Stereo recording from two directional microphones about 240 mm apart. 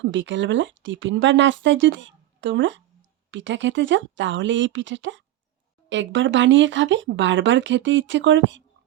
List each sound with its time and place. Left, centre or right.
0.0 s speech: right